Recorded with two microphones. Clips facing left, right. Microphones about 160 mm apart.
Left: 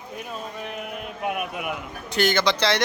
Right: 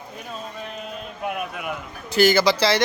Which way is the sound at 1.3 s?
10° left (ahead or behind).